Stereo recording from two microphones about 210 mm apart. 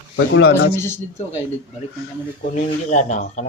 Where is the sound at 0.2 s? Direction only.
60° left (ahead or behind).